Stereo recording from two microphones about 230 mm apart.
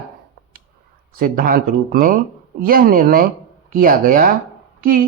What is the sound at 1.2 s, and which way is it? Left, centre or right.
A woman's voice, right.